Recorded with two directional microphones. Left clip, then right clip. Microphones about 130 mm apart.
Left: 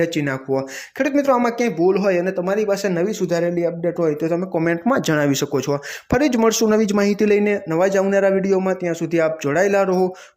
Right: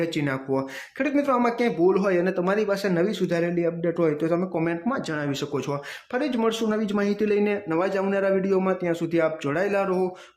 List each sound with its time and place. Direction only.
0.0 s speech: 25° left (ahead or behind)
4.9 s speech: 55° left (ahead or behind); by 6.1 s 30° left (ahead or behind)
6.1 s speech: 45° left (ahead or behind)